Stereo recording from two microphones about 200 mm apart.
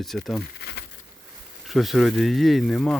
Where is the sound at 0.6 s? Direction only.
55° left (ahead or behind).